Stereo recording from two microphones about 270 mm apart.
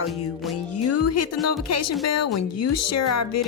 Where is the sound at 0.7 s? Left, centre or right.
Left.